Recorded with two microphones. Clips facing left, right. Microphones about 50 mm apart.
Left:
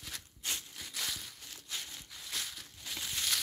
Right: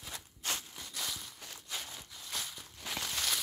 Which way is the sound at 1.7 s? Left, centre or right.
Right.